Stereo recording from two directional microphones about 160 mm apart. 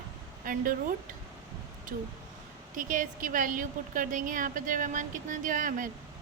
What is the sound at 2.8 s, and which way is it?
A woman's voice, 55° right (ahead or behind).